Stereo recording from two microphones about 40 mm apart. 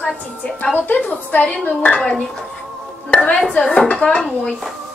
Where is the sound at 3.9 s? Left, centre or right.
Left.